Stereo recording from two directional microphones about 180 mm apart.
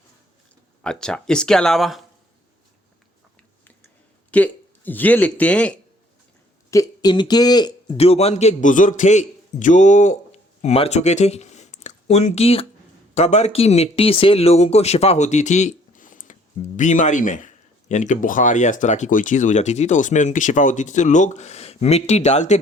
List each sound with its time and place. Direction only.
0.8 s speech: 5° left (ahead or behind)
4.3 s speech: 10° left (ahead or behind)
6.7 s speech: 20° left (ahead or behind); by 22.6 s 40° left (ahead or behind)